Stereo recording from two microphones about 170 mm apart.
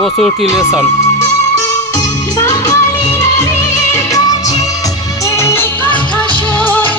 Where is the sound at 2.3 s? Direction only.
15° left (ahead or behind).